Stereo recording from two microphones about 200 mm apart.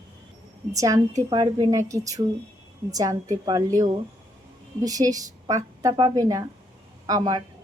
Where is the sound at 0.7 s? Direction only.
15° right (ahead or behind).